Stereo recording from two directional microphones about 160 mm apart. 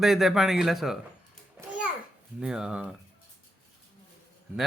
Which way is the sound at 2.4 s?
5° right (ahead or behind).